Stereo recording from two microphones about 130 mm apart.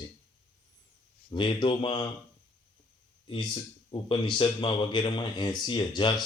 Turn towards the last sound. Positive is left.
turn(degrees=35)  # may be behind; listen again after turning